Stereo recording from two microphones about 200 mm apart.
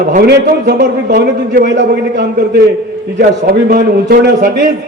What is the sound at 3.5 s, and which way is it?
A man's voice, 50° right (ahead or behind).